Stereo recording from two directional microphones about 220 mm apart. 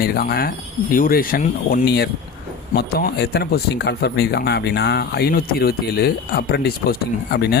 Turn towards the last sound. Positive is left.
turn(degrees=45)  # may be behind; listen again after turning